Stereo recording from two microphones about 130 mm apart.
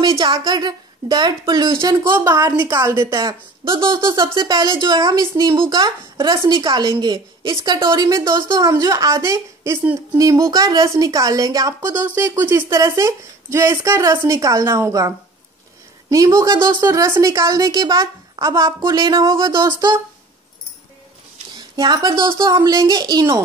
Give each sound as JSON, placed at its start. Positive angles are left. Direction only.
{"t": 0.0, "sound": "a woman's voice", "side_deg": -40}
{"t": 1.8, "sound": "a woman's voice", "side_deg": -20}
{"t": 3.3, "sound": "a woman's voice", "side_deg": -40}
{"t": 21.7, "sound": "a woman's voice", "side_deg": -30}